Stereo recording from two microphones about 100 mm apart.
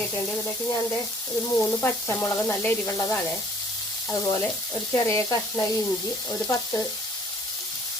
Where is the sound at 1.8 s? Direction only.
25° left (ahead or behind).